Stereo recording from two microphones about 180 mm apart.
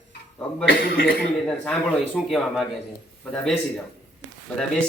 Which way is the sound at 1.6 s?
10° left (ahead or behind).